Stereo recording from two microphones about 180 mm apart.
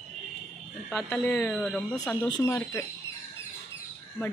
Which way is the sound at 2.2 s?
20° left (ahead or behind).